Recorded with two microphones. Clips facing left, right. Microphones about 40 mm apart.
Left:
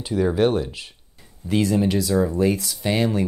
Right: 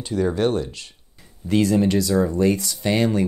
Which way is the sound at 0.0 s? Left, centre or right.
Centre.